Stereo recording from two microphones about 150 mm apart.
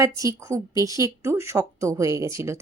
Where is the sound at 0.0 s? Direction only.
20° right (ahead or behind).